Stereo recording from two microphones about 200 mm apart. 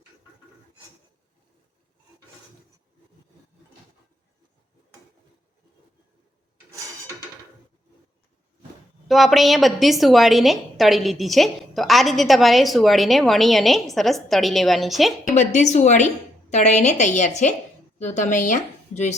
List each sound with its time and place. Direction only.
9.0 s a woman's voice: centre (ahead or behind)
15.4 s a woman's voice: 35° left (ahead or behind)